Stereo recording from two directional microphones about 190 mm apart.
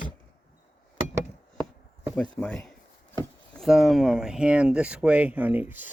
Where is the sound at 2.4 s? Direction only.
5° left (ahead or behind).